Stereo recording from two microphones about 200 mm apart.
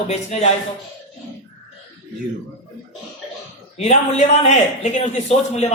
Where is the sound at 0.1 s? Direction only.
35° left (ahead or behind).